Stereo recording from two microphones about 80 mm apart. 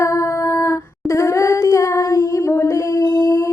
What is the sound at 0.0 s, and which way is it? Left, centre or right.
Humming, left.